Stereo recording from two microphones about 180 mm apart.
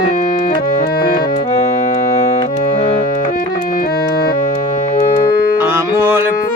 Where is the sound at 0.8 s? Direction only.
55° left (ahead or behind).